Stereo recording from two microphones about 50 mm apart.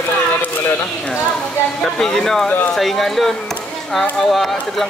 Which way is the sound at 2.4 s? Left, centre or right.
Left.